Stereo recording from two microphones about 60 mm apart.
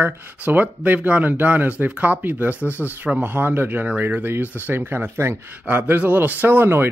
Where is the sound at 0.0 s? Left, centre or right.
Right.